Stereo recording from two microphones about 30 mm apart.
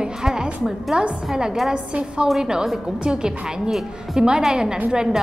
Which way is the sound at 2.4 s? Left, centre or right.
Right.